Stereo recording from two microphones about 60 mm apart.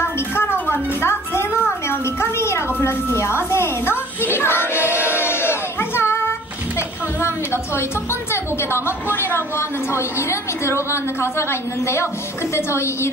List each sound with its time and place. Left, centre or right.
0.0 s music: left
1.6 s a sound: left
7.2 s a woman's voice: left